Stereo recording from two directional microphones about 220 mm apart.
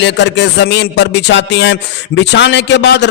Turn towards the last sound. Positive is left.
turn(degrees=50)  # may be behind; listen again after turning